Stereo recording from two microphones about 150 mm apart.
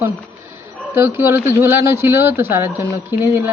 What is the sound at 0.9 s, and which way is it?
Speech, 15° right (ahead or behind).